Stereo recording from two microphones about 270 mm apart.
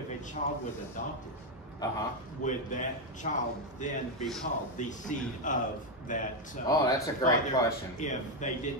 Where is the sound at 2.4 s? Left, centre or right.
Left.